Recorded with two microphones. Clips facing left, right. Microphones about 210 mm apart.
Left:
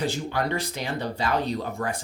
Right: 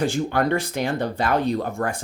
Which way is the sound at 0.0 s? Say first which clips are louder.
Right 5 dB; 55° right (ahead or behind).